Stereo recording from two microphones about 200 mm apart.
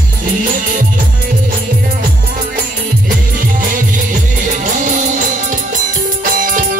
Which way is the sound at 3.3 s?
40° right (ahead or behind).